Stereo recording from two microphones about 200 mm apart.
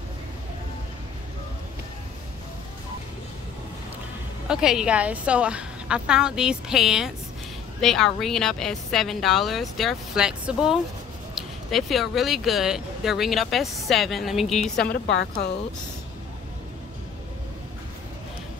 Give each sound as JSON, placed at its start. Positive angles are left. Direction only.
{"t": 4.5, "sound": "speech", "side_deg": -5}
{"t": 14.9, "sound": "a woman's voice", "side_deg": 55}